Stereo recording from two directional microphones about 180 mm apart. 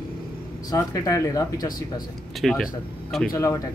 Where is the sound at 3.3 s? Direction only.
15° left (ahead or behind).